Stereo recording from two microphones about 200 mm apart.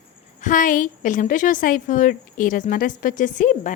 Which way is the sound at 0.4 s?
40° left (ahead or behind).